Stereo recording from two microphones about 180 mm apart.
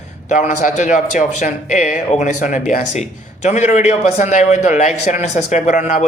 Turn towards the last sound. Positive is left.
turn(degrees=40)  # may be behind; listen again after turning